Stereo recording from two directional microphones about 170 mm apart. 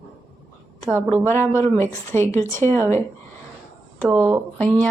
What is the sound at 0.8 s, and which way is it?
Speech, 10° right (ahead or behind).